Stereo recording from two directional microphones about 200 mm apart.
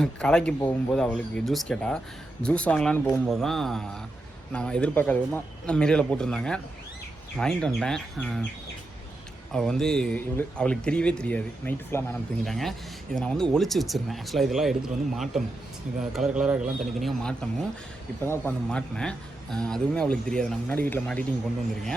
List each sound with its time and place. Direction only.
0.0 s speech: 5° left (ahead or behind)
9.5 s speech: centre (ahead or behind)